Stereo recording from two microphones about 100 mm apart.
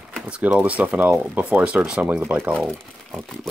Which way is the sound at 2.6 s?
Centre (ahead or behind).